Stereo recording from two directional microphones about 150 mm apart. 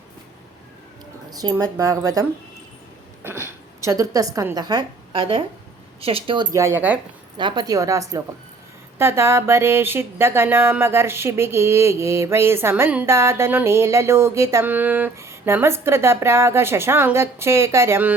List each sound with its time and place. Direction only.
1.3 s speech: 25° right (ahead or behind)
3.2 s a woman's voice: 15° right (ahead or behind)
7.3 s speech: 30° right (ahead or behind)
9.0 s a sound: 20° right (ahead or behind)